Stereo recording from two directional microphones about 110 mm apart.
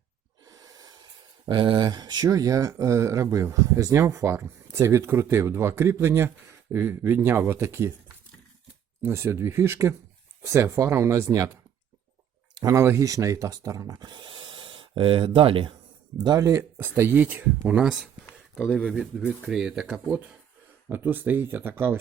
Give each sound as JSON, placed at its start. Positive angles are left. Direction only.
{"t": 0.4, "sound": "gasp", "side_deg": -30}
{"t": 1.5, "sound": "speech", "side_deg": -50}
{"t": 9.0, "sound": "speech", "side_deg": -20}
{"t": 12.5, "sound": "speech", "side_deg": -30}
{"t": 16.2, "sound": "speech", "side_deg": -30}